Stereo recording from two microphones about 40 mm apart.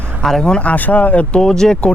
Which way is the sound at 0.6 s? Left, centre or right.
Left.